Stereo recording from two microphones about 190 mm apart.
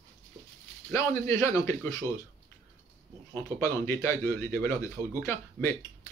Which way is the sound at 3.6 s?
15° left (ahead or behind).